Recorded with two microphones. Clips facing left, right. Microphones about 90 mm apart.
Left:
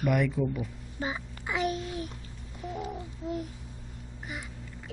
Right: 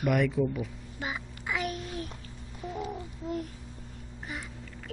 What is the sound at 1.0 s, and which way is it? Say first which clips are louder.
Music: left 2 dB; 30° left (ahead or behind).